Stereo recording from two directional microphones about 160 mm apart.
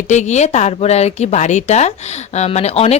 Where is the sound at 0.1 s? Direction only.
45° left (ahead or behind).